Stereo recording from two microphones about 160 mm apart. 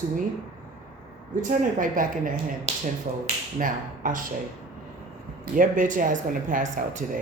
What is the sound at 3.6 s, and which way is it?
Speech, 55° right (ahead or behind).